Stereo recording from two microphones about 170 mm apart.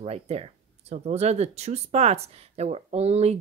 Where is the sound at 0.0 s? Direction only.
35° right (ahead or behind).